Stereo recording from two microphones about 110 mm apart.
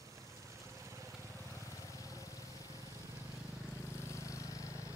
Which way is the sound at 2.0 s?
30° left (ahead or behind).